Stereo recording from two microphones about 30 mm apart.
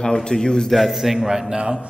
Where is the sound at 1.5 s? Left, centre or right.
Right.